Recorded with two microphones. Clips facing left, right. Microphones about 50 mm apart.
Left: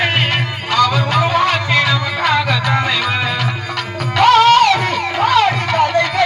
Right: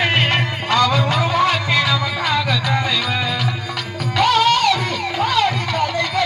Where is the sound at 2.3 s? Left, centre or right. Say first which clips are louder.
Left 3 dB; centre.